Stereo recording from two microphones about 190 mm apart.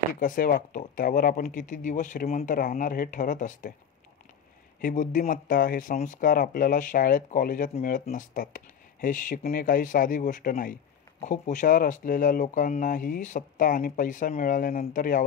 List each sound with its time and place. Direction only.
0.2 s speech: 45° left (ahead or behind)
4.8 s speech: 45° left (ahead or behind)